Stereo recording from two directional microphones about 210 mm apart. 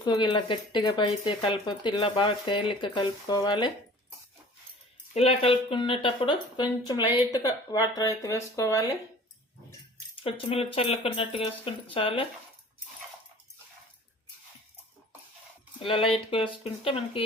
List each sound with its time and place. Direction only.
0.0 s speech: 20° left (ahead or behind)
5.1 s speech: 30° left (ahead or behind)
10.2 s speech: 25° left (ahead or behind)
15.8 s speech: 25° left (ahead or behind)